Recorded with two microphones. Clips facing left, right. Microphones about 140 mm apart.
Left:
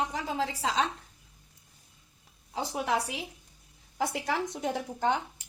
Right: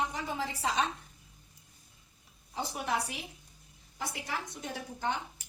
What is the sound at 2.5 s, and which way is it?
A woman's voice, 80° left.